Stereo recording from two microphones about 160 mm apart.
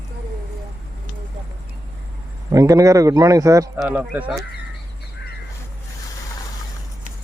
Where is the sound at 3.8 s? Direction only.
10° right (ahead or behind).